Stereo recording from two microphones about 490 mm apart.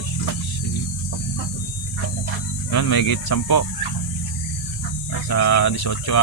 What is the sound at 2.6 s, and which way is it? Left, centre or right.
Speech, left.